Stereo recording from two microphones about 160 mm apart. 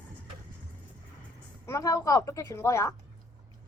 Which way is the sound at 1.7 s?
20° left (ahead or behind).